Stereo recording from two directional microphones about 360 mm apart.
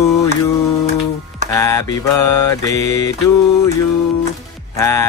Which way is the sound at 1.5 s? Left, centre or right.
Centre.